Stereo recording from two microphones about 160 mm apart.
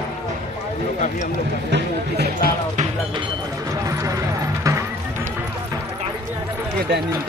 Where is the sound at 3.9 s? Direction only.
20° right (ahead or behind).